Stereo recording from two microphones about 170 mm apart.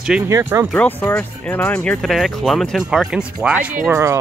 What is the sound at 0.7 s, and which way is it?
Speech, 10° left (ahead or behind).